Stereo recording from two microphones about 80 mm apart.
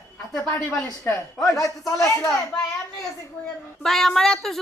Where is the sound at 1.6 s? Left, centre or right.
Left.